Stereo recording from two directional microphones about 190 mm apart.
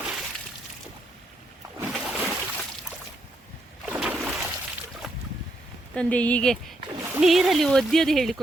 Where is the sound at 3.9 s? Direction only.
5° right (ahead or behind).